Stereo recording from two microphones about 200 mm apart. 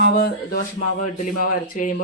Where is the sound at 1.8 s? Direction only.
40° left (ahead or behind).